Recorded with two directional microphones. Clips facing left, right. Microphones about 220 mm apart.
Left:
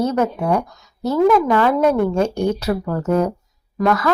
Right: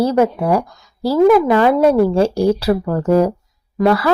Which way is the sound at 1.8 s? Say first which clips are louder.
Right 4 dB; 30° right (ahead or behind).